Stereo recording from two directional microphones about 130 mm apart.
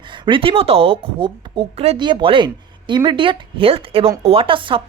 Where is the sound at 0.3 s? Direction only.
45° right (ahead or behind).